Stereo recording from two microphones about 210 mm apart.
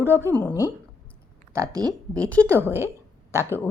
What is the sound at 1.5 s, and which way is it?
Speech, 15° right (ahead or behind).